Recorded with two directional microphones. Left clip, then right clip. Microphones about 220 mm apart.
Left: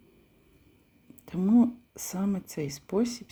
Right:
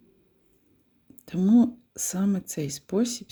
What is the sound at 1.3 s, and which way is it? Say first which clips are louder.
Speech: right 3 dB; 30° right (ahead or behind).